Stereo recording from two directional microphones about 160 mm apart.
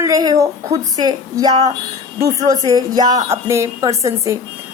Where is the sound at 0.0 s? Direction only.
25° right (ahead or behind).